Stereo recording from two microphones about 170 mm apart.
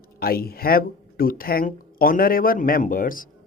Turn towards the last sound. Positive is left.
turn(degrees=55)  # may be behind; listen again after turning